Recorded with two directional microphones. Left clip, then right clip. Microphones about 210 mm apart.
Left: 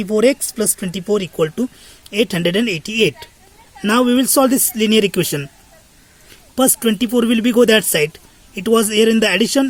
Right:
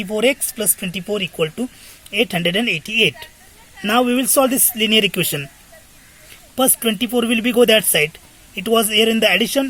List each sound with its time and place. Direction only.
0.0 s speech: 45° left (ahead or behind)
6.6 s speech: 45° left (ahead or behind)